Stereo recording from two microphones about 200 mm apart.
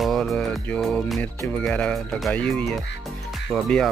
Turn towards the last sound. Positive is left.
turn(degrees=5)  # may be behind; listen again after turning